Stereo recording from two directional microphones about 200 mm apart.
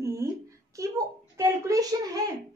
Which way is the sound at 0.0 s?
15° right (ahead or behind).